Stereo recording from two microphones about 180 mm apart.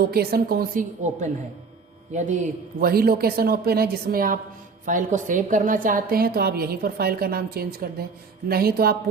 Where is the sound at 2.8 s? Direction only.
55° right (ahead or behind).